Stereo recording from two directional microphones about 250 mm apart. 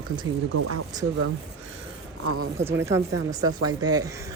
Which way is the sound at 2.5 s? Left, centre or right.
Centre.